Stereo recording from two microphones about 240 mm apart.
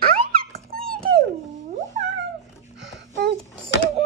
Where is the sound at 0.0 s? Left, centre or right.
Right.